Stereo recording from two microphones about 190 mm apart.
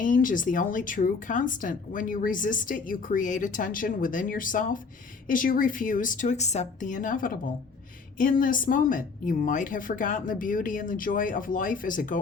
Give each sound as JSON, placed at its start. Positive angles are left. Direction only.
{"t": 0.0, "sound": "speech", "side_deg": 45}